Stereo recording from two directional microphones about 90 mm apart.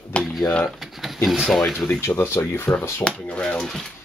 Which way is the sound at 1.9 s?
30° left (ahead or behind).